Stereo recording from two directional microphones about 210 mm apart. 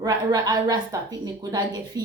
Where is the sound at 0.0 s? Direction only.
20° right (ahead or behind).